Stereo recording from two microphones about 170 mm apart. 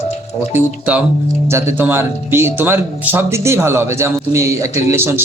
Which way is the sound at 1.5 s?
15° right (ahead or behind).